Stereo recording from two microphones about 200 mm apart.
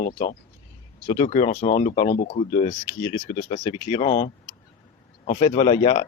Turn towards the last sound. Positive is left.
turn(degrees=30)  # may be behind; listen again after turning